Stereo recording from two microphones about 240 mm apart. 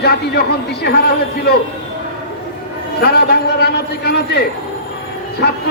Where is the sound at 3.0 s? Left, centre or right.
Left.